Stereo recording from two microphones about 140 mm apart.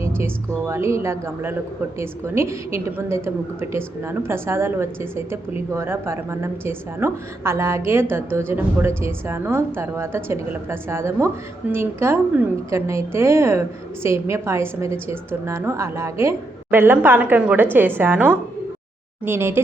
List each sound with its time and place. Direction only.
0.6 s a woman's voice: 20° right (ahead or behind)